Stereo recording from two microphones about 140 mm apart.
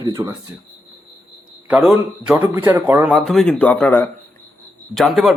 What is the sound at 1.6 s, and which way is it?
Speech, 5° right (ahead or behind).